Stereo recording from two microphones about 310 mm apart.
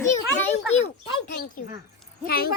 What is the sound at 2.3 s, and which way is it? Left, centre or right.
Speech, left.